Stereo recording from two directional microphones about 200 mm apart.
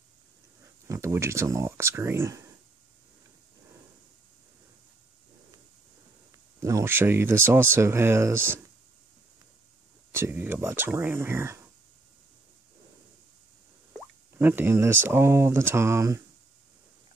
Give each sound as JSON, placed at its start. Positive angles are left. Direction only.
{"t": 0.8, "sound": "speech", "side_deg": -15}
{"t": 6.6, "sound": "speech", "side_deg": -15}
{"t": 10.1, "sound": "speech", "side_deg": -10}
{"t": 14.4, "sound": "speech", "side_deg": -10}